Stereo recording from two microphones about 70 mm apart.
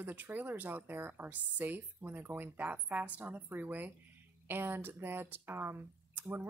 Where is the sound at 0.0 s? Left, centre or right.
Right.